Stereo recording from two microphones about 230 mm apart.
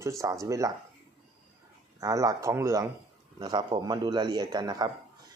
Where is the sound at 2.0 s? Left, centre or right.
Centre.